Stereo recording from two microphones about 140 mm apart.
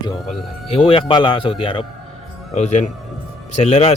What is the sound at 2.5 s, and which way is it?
Speech, 55° left (ahead or behind).